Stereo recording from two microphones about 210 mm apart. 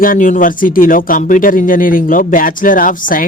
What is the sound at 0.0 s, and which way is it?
Speech, 40° left (ahead or behind).